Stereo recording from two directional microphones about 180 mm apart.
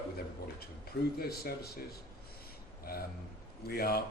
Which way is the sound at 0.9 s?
60° left (ahead or behind).